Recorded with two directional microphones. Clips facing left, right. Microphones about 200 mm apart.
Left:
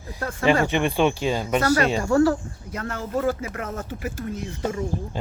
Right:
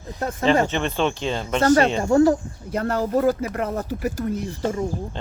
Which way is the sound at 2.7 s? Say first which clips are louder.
Right 6 dB; 35° right (ahead or behind).